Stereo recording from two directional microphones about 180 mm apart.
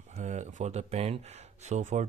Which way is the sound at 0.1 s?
40° right (ahead or behind).